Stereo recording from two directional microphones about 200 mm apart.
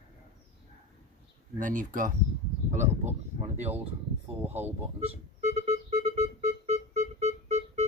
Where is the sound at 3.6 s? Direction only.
10° right (ahead or behind).